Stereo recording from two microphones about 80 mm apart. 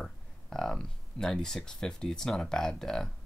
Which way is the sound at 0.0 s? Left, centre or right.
Centre.